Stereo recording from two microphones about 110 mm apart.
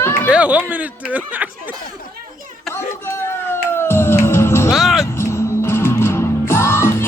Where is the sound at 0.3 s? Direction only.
10° right (ahead or behind).